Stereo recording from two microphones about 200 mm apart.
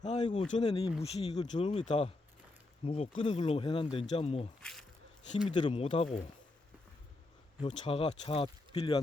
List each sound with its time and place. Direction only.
0.0 s speech: 35° left (ahead or behind)
4.6 s speech: 5° left (ahead or behind)
5.5 s speech: 25° left (ahead or behind)
7.6 s speech: 30° left (ahead or behind)